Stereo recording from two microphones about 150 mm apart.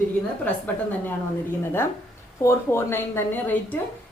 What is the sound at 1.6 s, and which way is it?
A woman's voice, 15° left (ahead or behind).